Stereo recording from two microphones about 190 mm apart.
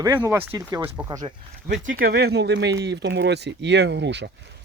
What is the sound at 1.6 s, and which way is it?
Speech, 60° right (ahead or behind).